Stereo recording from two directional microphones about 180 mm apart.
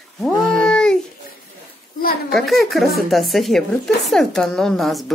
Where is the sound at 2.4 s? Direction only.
Centre (ahead or behind).